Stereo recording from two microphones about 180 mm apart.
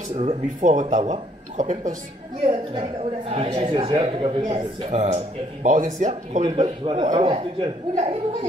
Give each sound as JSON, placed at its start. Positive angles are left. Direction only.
{"t": 0.1, "sound": "speech", "side_deg": -35}
{"t": 2.4, "sound": "speech", "side_deg": -30}
{"t": 6.4, "sound": "speech", "side_deg": -30}